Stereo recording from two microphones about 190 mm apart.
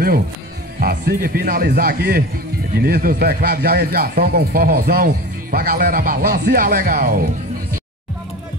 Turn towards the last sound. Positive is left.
turn(degrees=-50)  # may be behind; listen again after turning